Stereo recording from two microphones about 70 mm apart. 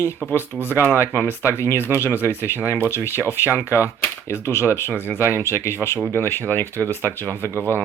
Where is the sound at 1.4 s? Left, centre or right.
Left.